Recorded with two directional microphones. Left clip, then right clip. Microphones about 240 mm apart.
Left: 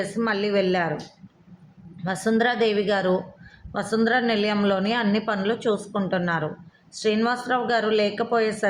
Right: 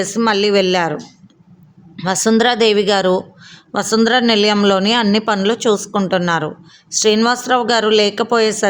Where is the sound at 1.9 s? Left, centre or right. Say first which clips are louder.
Right 9 dB; right.